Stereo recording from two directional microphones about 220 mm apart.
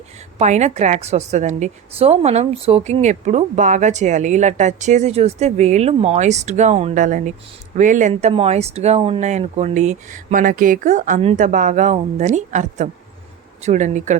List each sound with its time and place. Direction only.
0.3 s a woman's voice: 30° right (ahead or behind)